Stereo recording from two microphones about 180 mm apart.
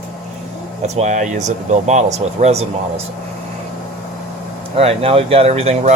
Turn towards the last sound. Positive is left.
turn(degrees=-35)  # may be behind; listen again after turning